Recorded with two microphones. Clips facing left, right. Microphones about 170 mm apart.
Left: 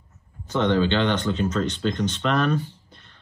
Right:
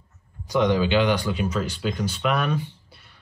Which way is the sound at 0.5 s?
10° right (ahead or behind).